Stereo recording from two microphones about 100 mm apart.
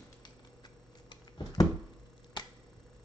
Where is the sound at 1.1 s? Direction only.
40° left (ahead or behind).